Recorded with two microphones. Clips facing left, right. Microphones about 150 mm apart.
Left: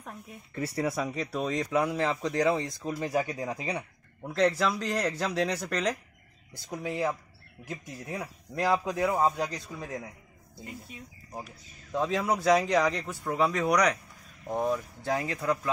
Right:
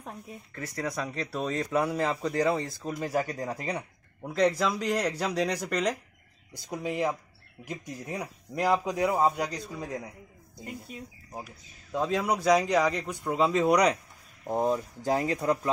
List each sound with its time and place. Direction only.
0.0 s speech: 30° right (ahead or behind)
0.6 s a man's voice: 10° left (ahead or behind); by 8.7 s 10° right (ahead or behind)
9.0 s speech: centre (ahead or behind)
11.3 s a man's voice: 5° right (ahead or behind); by 15.7 s 30° right (ahead or behind)